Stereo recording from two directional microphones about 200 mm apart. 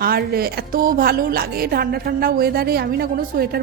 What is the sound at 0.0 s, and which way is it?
A woman's voice, 50° right (ahead or behind).